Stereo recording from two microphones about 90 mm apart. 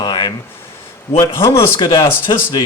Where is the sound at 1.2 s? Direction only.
30° left (ahead or behind).